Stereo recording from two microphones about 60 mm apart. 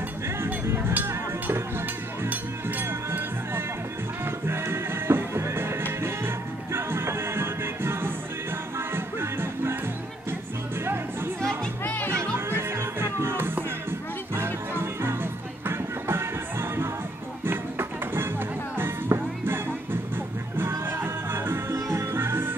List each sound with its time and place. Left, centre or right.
0.4 s music: right
12.1 s music: right
21.7 s music: right